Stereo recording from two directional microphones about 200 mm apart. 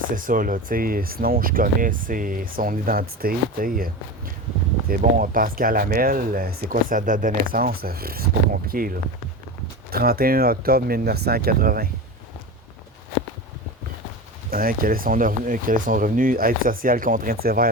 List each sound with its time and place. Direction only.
0.3 s speech: 40° right (ahead or behind)
9.9 s speech: 50° right (ahead or behind)
14.5 s speech: 45° right (ahead or behind)